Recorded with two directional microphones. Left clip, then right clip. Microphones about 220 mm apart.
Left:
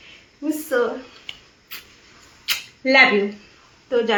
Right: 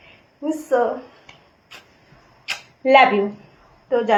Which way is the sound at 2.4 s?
20° left (ahead or behind).